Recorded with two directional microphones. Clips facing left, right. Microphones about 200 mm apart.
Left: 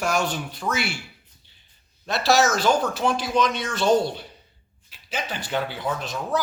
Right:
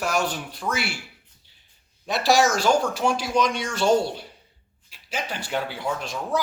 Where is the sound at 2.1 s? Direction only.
15° right (ahead or behind).